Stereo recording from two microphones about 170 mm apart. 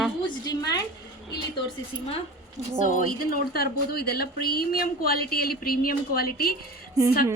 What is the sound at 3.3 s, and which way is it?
Speech, 65° left (ahead or behind).